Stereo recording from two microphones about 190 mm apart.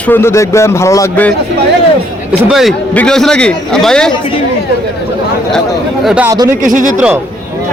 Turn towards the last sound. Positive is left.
turn(degrees=-45)  # may be behind; listen again after turning